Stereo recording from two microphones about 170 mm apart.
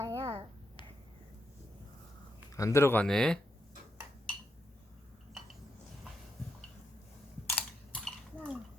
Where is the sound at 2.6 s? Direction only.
15° left (ahead or behind).